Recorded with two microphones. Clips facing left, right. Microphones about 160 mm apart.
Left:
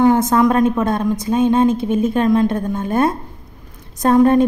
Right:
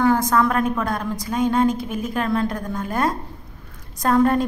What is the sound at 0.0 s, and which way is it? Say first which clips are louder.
A woman's voice: left 5 dB; 25° left (ahead or behind).